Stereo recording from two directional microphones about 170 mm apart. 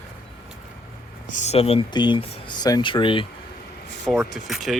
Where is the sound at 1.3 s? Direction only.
45° left (ahead or behind).